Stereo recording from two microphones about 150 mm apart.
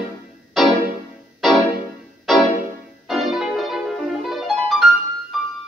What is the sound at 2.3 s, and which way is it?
Music, centre (ahead or behind).